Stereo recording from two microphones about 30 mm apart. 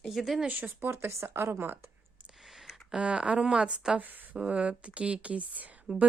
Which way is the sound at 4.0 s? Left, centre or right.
Right.